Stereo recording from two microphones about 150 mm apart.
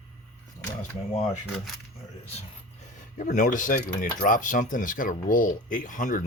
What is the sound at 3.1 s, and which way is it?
Speech, 55° left (ahead or behind).